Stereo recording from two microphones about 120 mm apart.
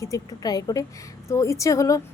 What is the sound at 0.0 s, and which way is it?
Speech, 30° left (ahead or behind).